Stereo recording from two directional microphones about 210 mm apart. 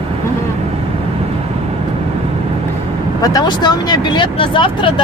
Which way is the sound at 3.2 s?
20° left (ahead or behind).